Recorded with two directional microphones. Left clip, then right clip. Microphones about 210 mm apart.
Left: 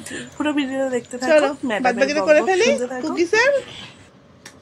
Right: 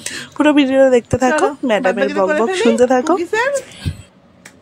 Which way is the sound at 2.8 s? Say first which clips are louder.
Right 13 dB; 45° right (ahead or behind).